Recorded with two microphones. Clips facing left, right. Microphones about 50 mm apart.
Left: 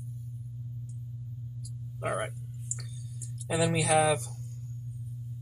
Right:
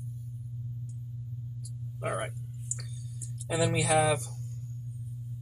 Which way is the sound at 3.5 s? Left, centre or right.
Centre.